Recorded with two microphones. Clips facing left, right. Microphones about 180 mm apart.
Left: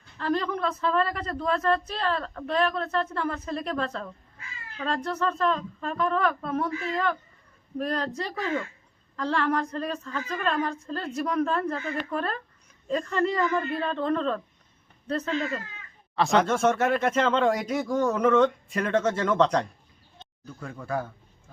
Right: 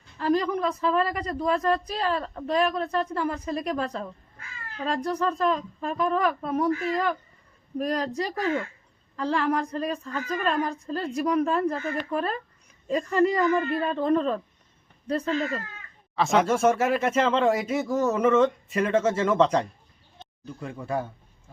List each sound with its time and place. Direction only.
0.2 s a woman's voice: 10° right (ahead or behind)
20.5 s speech: 20° right (ahead or behind)